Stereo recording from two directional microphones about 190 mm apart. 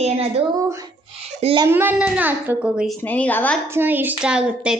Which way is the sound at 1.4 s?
30° right (ahead or behind).